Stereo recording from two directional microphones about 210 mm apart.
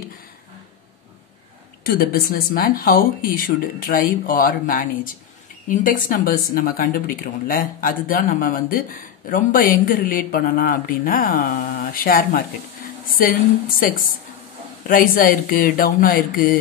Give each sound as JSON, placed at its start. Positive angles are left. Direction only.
{"t": 1.9, "sound": "speech", "side_deg": 45}
{"t": 14.9, "sound": "speech", "side_deg": 40}